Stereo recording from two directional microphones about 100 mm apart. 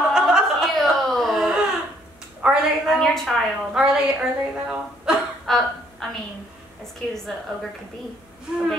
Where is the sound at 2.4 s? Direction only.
5° right (ahead or behind).